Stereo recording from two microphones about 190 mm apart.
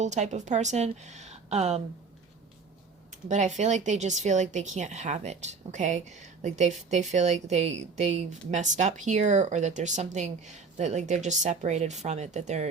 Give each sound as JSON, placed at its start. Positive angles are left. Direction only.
{"t": 0.0, "sound": "speech", "side_deg": -40}
{"t": 3.2, "sound": "speech", "side_deg": -40}